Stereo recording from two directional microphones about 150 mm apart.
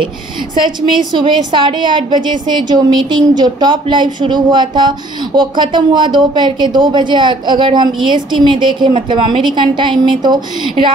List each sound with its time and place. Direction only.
0.8 s a woman's voice: 30° right (ahead or behind)